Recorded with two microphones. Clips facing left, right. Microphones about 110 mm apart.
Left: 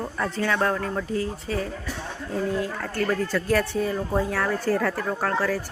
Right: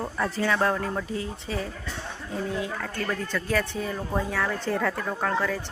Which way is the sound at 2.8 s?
10° left (ahead or behind).